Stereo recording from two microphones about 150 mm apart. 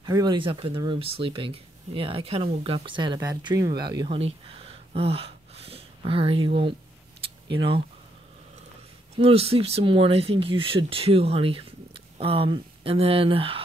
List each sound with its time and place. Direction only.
0.0 s speech: 30° right (ahead or behind)
4.2 s speech: 40° right (ahead or behind)
9.1 s speech: 40° right (ahead or behind)